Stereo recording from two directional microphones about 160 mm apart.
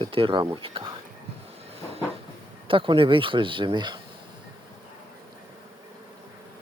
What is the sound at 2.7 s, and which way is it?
Speech, 35° right (ahead or behind).